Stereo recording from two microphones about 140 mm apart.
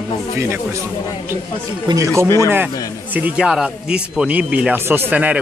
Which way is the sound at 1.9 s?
25° right (ahead or behind).